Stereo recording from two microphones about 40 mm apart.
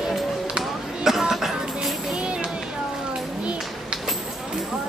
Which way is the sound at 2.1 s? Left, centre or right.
Right.